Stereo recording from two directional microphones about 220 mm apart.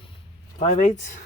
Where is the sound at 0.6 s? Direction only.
30° left (ahead or behind).